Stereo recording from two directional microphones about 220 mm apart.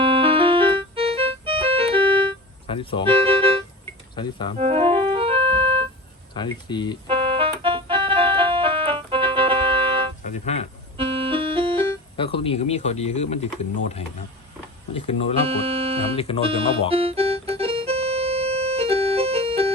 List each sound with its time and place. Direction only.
0.0 s music: 25° right (ahead or behind)
2.6 s speech: 25° left (ahead or behind)
3.1 s music: 25° right (ahead or behind)
4.1 s speech: 20° left (ahead or behind)
4.5 s organ: 25° right (ahead or behind)
6.3 s speech: 20° left (ahead or behind)
7.1 s music: 25° right (ahead or behind)
10.2 s speech: 30° left (ahead or behind)
10.9 s music: 25° right (ahead or behind)
12.4 s speech: 25° left (ahead or behind)
15.4 s speech: 25° right (ahead or behind)
16.1 s speech: 25° left (ahead or behind)
16.9 s music: 25° right (ahead or behind)